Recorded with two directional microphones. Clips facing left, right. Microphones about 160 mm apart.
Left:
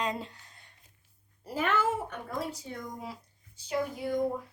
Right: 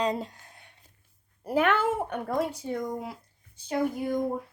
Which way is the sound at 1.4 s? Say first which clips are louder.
Right 5 dB; 60° right (ahead or behind).